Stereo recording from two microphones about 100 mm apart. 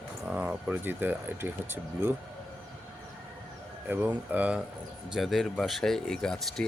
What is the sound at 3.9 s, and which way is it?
Speech, 15° right (ahead or behind).